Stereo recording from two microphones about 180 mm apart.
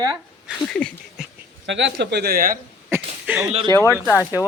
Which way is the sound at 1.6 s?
90° right.